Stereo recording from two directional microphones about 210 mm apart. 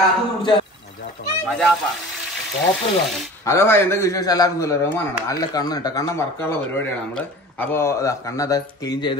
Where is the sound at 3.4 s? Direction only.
15° left (ahead or behind).